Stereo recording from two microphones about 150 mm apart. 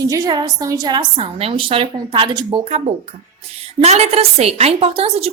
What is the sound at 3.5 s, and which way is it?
A woman's voice, 45° right (ahead or behind).